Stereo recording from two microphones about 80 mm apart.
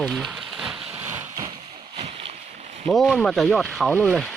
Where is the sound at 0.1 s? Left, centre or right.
Centre.